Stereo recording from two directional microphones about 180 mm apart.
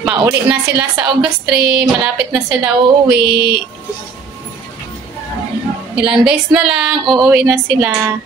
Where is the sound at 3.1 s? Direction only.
65° right (ahead or behind).